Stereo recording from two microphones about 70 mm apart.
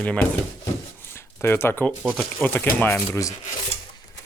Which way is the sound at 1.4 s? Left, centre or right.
Left.